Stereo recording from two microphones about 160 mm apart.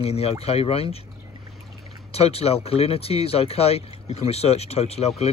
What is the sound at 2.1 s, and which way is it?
Speech, 40° left (ahead or behind).